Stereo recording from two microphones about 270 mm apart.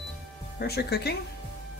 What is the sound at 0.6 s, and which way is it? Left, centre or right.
Speech, left.